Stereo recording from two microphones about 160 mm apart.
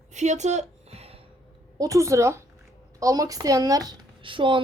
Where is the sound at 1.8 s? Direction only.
20° right (ahead or behind).